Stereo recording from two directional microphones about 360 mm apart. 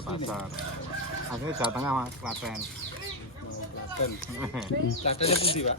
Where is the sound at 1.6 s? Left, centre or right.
Centre.